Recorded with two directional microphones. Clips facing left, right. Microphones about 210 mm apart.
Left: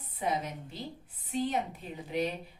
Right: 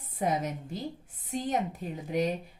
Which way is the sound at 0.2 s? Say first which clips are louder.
Right 3 dB; 45° right (ahead or behind).